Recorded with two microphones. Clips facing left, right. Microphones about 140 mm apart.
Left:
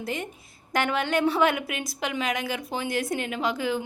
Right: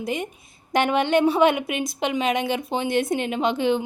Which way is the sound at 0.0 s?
15° right (ahead or behind).